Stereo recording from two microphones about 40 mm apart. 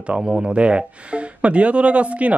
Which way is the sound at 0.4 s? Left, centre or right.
Right.